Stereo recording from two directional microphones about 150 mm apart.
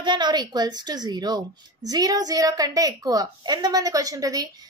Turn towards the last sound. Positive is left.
turn(degrees=-25)  # may be behind; listen again after turning